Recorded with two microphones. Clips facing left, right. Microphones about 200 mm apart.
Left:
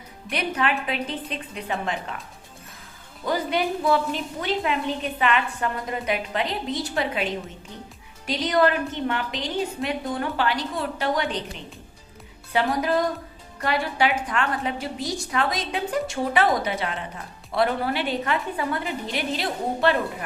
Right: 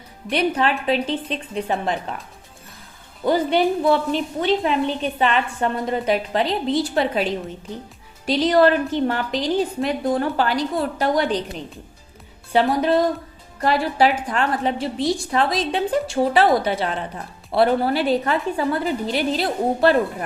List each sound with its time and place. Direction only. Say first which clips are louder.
0.3 s a woman's voice: right 5 dB; 30° right (ahead or behind)
3.2 s a woman's voice: right 6 dB; 30° right (ahead or behind)